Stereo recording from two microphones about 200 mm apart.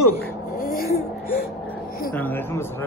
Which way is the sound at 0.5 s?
45° left (ahead or behind).